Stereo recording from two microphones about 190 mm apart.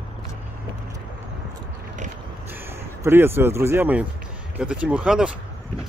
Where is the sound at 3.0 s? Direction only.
10° right (ahead or behind).